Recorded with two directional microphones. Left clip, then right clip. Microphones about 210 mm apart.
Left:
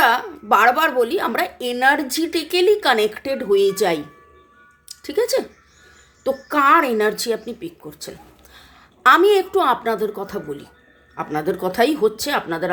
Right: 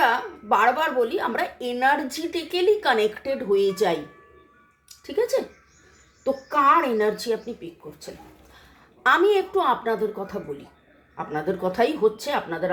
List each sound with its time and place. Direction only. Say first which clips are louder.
0.0 s speech: left 5 dB; 40° left (ahead or behind)